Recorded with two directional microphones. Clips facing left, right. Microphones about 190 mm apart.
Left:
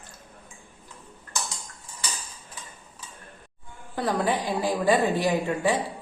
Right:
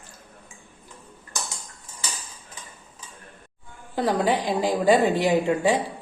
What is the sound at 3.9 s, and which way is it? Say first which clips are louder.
A woman's voice: right 3 dB; 15° right (ahead or behind).